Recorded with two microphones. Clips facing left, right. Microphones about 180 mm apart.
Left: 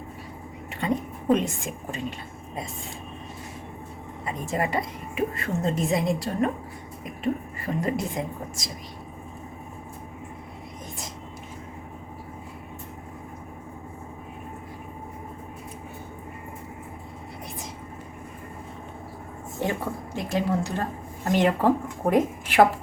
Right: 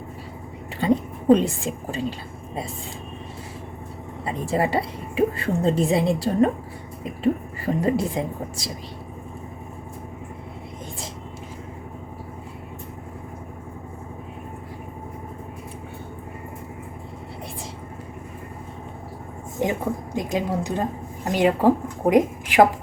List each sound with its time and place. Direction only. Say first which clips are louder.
0.8 s a woman's voice: right 6 dB; 30° right (ahead or behind)
4.3 s a woman's voice: right 4 dB; 30° right (ahead or behind)
19.5 s a woman's voice: right 4 dB; 15° right (ahead or behind)